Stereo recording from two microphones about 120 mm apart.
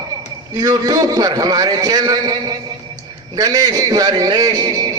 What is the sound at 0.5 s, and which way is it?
A man's voice, 30° right (ahead or behind).